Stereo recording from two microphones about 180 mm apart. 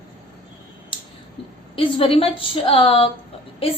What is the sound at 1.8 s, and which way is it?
A woman's voice, 30° left (ahead or behind).